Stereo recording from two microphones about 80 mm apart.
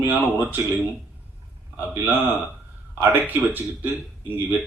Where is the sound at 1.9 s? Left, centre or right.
Right.